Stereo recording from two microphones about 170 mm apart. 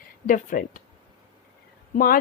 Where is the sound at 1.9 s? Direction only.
55° left (ahead or behind).